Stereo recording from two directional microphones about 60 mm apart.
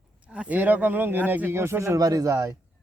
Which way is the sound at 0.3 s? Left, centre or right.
Right.